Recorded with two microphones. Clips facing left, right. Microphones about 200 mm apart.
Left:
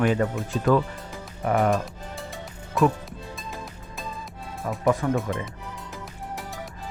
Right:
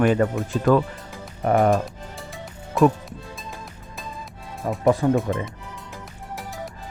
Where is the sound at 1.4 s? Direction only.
35° right (ahead or behind).